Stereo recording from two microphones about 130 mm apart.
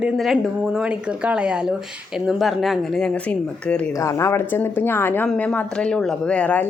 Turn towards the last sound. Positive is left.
turn(degrees=10)  # may be behind; listen again after turning